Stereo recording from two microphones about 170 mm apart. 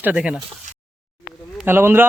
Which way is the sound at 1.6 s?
10° right (ahead or behind).